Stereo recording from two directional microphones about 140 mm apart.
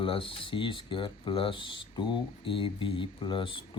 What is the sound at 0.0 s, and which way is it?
Speech, 40° left (ahead or behind).